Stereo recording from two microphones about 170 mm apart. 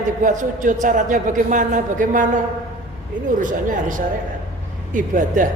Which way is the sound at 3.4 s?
50° right (ahead or behind).